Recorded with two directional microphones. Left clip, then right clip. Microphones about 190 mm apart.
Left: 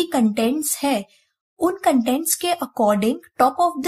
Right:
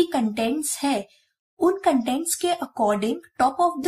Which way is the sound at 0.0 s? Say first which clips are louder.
Left 2 dB; 40° left (ahead or behind).